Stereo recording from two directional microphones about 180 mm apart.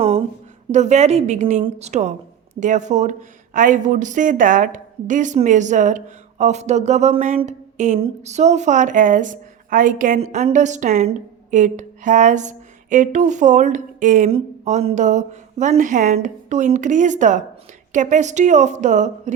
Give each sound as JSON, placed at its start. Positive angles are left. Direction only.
{"t": 0.7, "sound": "speech", "side_deg": -40}